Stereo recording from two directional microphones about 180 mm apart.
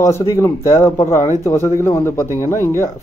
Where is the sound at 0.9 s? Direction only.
40° left (ahead or behind).